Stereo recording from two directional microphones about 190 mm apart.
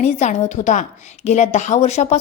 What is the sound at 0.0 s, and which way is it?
A woman's voice, 35° left (ahead or behind).